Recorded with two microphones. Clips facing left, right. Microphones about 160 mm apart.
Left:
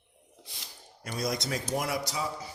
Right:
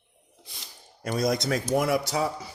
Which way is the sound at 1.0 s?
55° right (ahead or behind).